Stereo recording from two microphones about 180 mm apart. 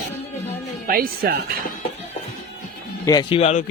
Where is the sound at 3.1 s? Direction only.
25° left (ahead or behind).